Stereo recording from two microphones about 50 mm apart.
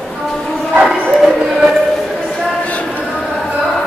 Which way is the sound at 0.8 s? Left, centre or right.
Centre.